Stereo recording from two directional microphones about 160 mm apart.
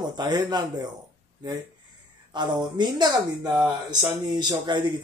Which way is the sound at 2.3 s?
30° right (ahead or behind).